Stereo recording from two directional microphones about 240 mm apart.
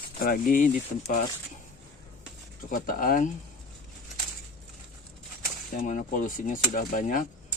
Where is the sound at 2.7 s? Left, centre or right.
Left.